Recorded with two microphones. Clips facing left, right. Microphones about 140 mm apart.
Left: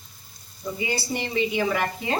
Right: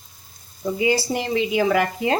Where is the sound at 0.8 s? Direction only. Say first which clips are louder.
Right 7 dB; 90° right.